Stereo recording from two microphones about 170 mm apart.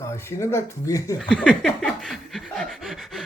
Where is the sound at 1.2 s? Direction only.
5° left (ahead or behind).